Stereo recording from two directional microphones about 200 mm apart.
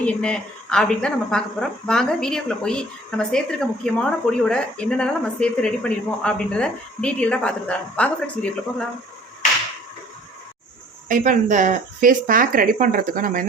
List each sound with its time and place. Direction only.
0.0 s speech: 5° left (ahead or behind)
11.1 s speech: 40° right (ahead or behind)